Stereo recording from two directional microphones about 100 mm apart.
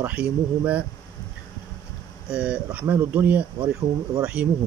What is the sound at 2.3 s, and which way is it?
Speech, 10° right (ahead or behind).